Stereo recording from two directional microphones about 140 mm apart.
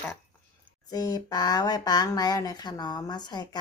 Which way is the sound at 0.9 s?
25° left (ahead or behind).